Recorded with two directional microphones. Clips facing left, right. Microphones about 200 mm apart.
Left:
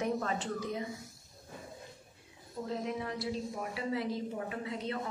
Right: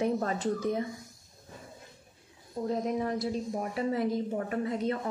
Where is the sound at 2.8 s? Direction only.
45° right (ahead or behind).